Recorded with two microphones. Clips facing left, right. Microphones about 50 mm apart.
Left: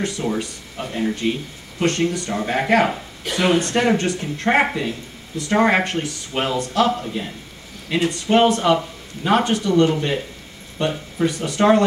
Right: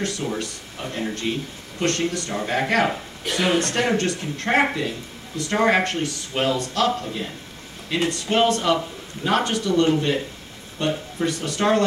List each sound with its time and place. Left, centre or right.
0.0 s speech: centre